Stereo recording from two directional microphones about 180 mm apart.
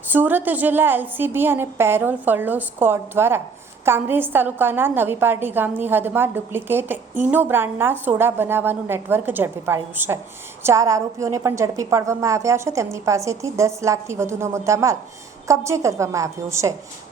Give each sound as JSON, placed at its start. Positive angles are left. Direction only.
{"t": 0.1, "sound": "a woman's voice", "side_deg": -10}